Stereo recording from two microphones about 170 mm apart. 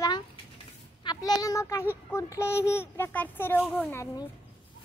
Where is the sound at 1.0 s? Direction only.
25° left (ahead or behind).